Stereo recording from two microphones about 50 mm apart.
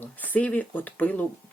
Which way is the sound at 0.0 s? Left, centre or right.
Left.